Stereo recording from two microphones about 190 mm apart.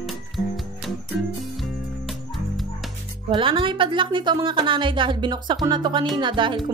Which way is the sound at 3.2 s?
25° right (ahead or behind).